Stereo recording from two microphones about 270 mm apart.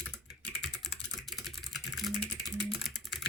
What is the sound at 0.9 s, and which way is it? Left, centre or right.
Typing, left.